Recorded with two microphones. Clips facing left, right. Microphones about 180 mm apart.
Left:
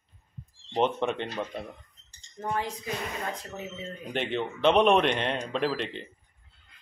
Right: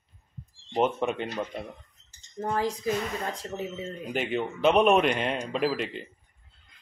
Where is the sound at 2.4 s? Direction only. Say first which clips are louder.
Right 3 dB; 35° right (ahead or behind).